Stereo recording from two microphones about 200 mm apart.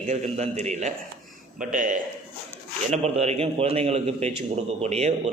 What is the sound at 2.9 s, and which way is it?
A man's voice, 30° right (ahead or behind).